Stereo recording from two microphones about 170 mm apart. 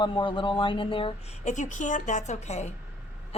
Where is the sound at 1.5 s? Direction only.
45° left (ahead or behind).